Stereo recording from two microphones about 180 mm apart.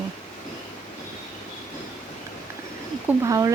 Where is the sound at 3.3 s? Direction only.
20° right (ahead or behind).